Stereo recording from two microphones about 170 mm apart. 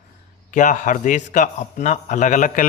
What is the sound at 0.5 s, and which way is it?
A man's voice, 50° left (ahead or behind).